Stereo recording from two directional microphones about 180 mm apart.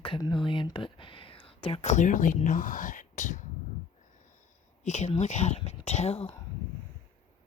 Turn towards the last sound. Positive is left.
turn(degrees=35)  # may be behind; listen again after turning